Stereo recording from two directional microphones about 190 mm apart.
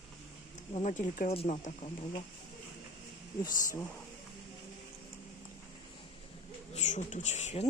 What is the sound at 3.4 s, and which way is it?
Speech, 15° left (ahead or behind).